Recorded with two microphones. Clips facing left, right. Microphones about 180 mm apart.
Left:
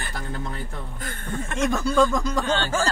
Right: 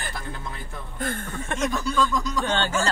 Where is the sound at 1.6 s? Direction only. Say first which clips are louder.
Left 4 dB; 50° left (ahead or behind).